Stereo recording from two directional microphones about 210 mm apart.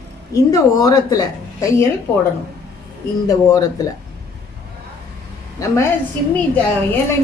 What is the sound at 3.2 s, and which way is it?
Speech, 15° left (ahead or behind).